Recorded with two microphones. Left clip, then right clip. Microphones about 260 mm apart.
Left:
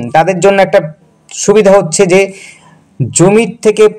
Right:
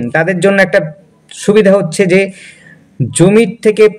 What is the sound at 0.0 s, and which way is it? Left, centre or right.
Speech, centre.